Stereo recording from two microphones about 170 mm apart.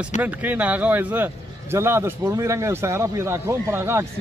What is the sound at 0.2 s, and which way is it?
Speech, 10° right (ahead or behind).